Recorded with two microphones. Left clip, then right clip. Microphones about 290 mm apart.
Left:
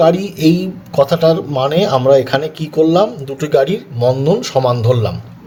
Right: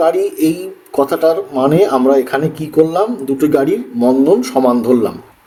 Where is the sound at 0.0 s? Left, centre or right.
Left.